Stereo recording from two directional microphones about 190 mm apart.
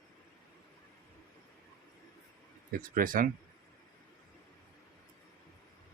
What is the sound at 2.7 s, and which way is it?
Speech, 50° right (ahead or behind).